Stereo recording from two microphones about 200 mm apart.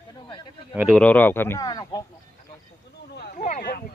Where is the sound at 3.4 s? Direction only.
45° left (ahead or behind).